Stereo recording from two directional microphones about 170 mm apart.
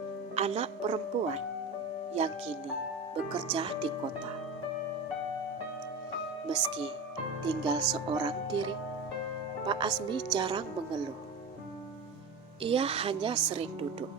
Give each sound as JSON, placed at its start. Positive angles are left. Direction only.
{"t": 0.3, "sound": "speech", "side_deg": -40}
{"t": 6.5, "sound": "speech", "side_deg": -30}
{"t": 12.6, "sound": "speech", "side_deg": -35}